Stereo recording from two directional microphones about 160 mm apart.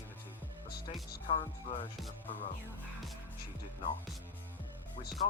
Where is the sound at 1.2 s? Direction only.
55° left (ahead or behind).